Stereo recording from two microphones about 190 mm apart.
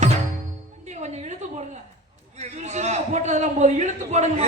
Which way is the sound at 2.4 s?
35° right (ahead or behind).